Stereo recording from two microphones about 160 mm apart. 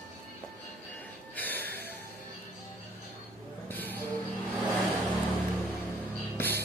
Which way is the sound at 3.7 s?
10° left (ahead or behind).